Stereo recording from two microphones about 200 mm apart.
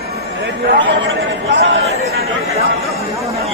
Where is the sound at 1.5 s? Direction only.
60° right (ahead or behind).